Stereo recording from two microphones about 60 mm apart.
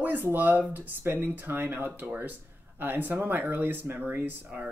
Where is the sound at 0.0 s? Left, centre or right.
Right.